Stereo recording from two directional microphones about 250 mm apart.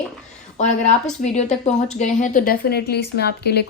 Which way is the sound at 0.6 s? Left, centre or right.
Left.